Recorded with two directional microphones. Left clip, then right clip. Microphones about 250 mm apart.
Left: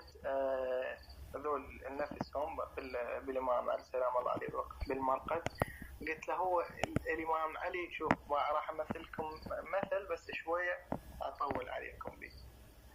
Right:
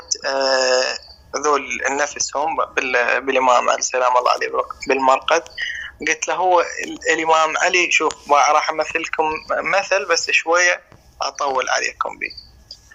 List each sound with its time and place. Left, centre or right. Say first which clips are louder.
0.2 s a man's voice: right 17 dB; right
6.1 s speech: right 19 dB; right